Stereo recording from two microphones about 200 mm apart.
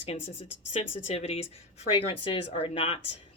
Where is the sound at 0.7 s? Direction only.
35° left (ahead or behind).